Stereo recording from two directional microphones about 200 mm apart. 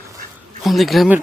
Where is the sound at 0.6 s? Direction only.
Centre (ahead or behind).